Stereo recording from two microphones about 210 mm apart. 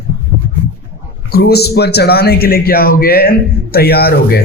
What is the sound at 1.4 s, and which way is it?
A man's voice, 50° left (ahead or behind).